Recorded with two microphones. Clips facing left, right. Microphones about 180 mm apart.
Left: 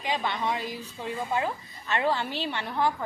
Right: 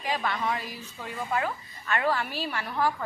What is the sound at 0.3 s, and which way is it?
A woman's voice, 20° left (ahead or behind).